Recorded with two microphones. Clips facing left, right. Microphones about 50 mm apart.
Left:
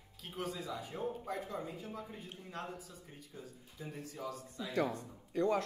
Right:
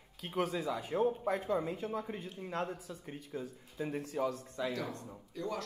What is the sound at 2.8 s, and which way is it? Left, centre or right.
Speech, right.